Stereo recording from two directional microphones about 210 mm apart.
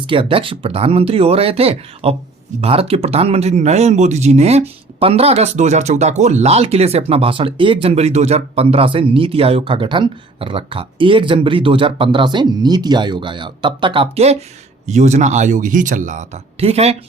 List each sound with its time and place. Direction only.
0.1 s speech: 25° right (ahead or behind)